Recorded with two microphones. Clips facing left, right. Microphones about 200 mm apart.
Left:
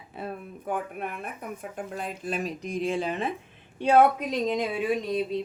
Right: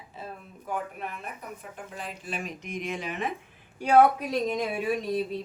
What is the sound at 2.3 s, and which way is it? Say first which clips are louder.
Speech: left 5 dB; 35° left (ahead or behind).